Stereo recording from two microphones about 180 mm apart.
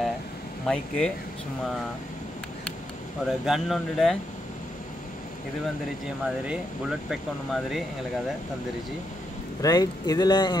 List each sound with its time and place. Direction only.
0.7 s speech: 5° left (ahead or behind)
3.3 s speech: centre (ahead or behind)
6.4 s speech: 5° right (ahead or behind)
9.6 s speech: 20° left (ahead or behind)